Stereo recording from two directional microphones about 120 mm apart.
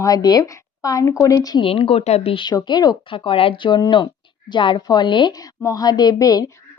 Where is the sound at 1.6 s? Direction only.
50° left (ahead or behind).